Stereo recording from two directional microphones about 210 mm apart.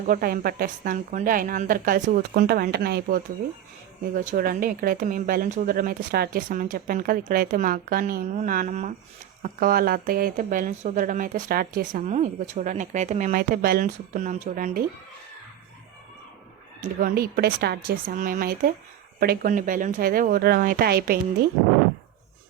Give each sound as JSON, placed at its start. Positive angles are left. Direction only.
{"t": 0.1, "sound": "a woman's voice", "side_deg": -45}
{"t": 4.1, "sound": "speech", "side_deg": -40}
{"t": 17.0, "sound": "a woman's voice", "side_deg": -45}